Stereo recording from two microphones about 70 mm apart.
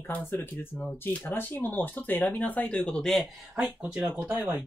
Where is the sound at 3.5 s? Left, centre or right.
Right.